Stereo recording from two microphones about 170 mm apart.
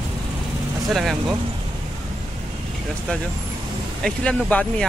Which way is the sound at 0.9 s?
Centre (ahead or behind).